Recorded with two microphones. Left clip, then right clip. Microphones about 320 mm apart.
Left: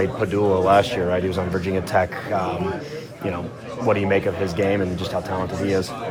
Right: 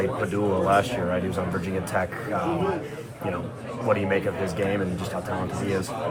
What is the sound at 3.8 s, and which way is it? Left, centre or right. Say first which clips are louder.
Speech: left 4 dB; left.